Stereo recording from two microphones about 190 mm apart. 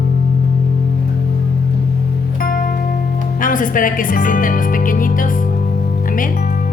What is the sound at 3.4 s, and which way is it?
Speech, 45° left (ahead or behind).